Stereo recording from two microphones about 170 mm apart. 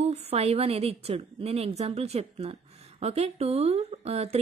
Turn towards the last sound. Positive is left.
turn(degrees=-35)  # may be behind; listen again after turning